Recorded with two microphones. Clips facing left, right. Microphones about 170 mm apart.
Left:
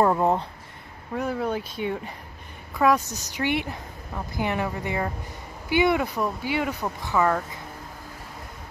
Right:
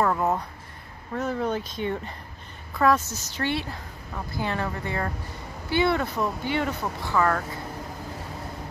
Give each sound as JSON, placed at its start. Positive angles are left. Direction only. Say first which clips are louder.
{"t": 0.0, "sound": "speech", "louder": "left 3 dB", "side_deg": 30}
{"t": 1.1, "sound": "speech", "louder": "even", "side_deg": 10}